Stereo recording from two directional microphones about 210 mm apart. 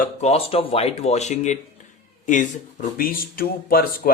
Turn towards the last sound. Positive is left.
turn(degrees=45)  # may be behind; listen again after turning